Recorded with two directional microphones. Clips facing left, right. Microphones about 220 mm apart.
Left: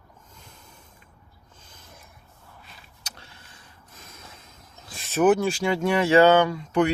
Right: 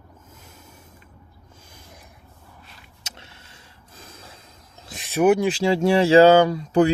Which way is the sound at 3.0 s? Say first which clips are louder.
Right 3 dB; 25° right (ahead or behind).